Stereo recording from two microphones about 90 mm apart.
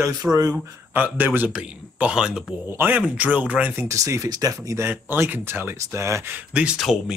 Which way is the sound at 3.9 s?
35° right (ahead or behind).